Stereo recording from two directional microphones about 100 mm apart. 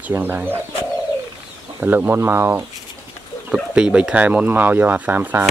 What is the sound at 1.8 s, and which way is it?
Speech, 20° right (ahead or behind).